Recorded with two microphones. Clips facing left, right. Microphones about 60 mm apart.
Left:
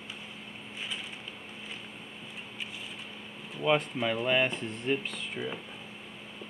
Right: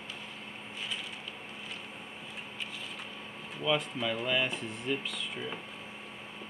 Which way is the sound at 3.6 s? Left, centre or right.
Left.